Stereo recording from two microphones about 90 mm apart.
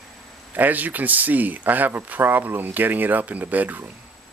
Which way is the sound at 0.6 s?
20° right (ahead or behind).